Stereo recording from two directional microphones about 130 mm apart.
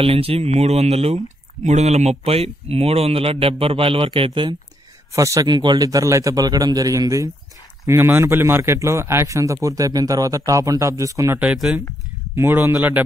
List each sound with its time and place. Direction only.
0.0 s speech: 50° right (ahead or behind)
5.1 s a man's voice: 25° right (ahead or behind)
11.3 s a man's voice: 5° right (ahead or behind)
12.4 s a man's voice: 20° right (ahead or behind)